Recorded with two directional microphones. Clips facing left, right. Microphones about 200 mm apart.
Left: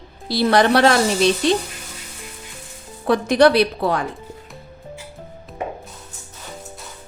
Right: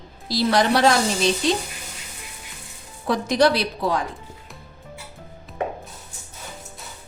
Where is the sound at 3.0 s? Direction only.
60° left (ahead or behind).